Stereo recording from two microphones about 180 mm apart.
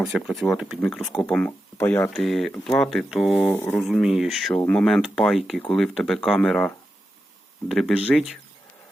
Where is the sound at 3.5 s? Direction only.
10° left (ahead or behind).